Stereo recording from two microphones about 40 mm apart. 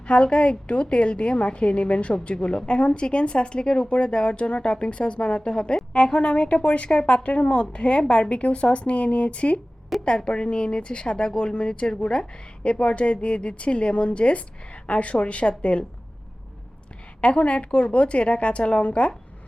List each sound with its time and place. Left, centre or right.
0.0 s a woman's voice: left
10.0 s a woman's voice: left
17.2 s a woman's voice: left